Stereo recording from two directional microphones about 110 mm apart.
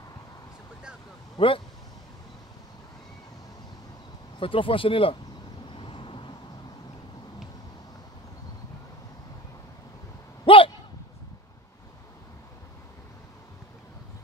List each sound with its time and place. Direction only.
1.4 s speech: 55° left (ahead or behind)
4.4 s speech: 55° left (ahead or behind)
5.7 s vehicle: 50° left (ahead or behind)
10.4 s a sound: 55° left (ahead or behind)